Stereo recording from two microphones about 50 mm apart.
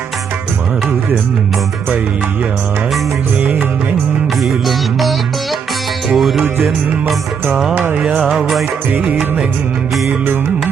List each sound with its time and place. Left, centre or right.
4.4 s music: centre
7.9 s music: right
8.3 s music: centre